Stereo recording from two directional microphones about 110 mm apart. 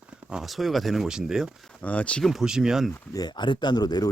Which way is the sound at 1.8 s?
10° left (ahead or behind).